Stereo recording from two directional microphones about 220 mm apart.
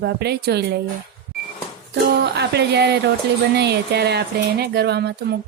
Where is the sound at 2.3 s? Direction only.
50° right (ahead or behind).